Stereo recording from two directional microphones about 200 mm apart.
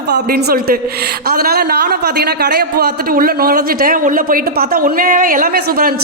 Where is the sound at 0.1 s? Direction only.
50° right (ahead or behind).